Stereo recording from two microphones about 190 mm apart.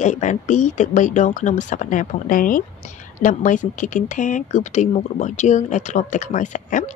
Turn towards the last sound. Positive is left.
turn(degrees=40)  # may be behind; listen again after turning